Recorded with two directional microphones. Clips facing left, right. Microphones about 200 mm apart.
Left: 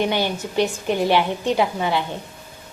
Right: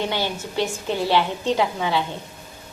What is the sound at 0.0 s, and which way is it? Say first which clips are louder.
A woman's voice: left 4 dB; 15° left (ahead or behind).